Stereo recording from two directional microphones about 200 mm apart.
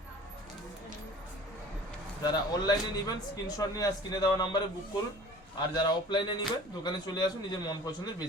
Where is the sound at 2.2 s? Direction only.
20° left (ahead or behind).